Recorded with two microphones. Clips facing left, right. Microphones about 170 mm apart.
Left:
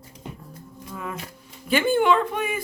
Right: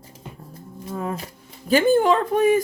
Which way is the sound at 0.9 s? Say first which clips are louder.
Right 6 dB; 35° right (ahead or behind).